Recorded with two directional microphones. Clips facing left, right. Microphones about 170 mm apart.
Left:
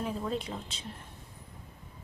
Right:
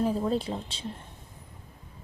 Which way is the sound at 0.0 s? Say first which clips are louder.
Right 7 dB; 35° right (ahead or behind).